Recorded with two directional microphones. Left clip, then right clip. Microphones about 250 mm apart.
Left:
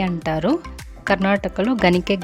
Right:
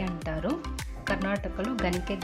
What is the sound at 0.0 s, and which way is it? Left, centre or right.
A woman's voice, left.